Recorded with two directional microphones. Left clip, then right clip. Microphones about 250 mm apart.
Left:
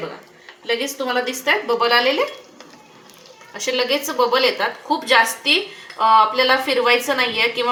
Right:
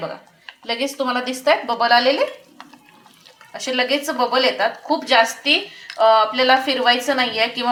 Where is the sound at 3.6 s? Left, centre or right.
Right.